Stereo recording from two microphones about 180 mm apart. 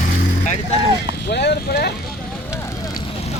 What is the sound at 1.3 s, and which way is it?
Vehicle, 65° left (ahead or behind).